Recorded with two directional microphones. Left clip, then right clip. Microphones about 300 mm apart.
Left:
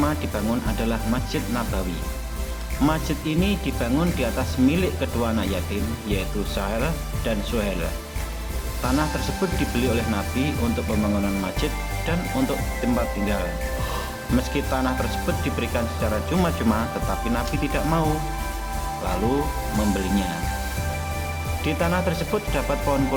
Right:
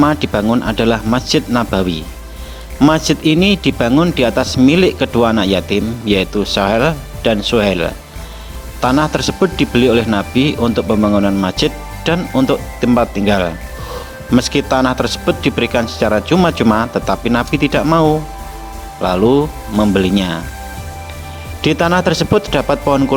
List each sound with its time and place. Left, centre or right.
0.0 s speech: right
2.8 s speech: right
19.0 s speech: right
21.6 s speech: right